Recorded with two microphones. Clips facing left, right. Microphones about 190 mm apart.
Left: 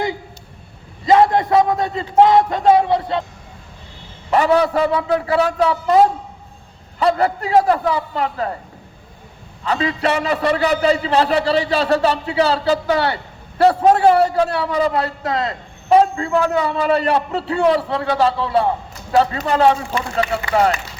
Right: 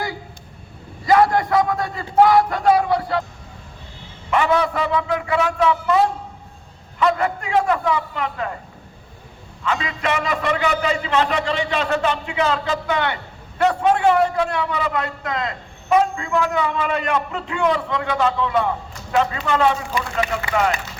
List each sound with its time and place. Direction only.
1.0 s a man's voice: 25° left (ahead or behind)
4.3 s a man's voice: 35° left (ahead or behind)
7.0 s a man's voice: 35° left (ahead or behind)
9.6 s a man's voice: 35° left (ahead or behind)